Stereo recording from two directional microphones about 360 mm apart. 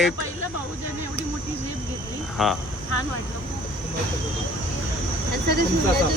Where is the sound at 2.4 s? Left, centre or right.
Centre.